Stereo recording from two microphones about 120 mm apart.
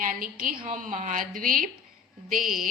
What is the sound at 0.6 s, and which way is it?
Speech, 90° right.